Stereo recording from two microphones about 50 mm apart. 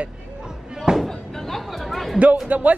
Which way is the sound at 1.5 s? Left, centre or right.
Centre.